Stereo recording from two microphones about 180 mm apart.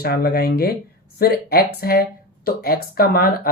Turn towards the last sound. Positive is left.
turn(degrees=60)  # may be behind; listen again after turning